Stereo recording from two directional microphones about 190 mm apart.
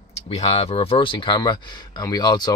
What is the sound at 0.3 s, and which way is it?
Speech, 30° left (ahead or behind).